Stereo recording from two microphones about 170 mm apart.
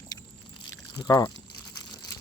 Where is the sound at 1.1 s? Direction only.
20° left (ahead or behind).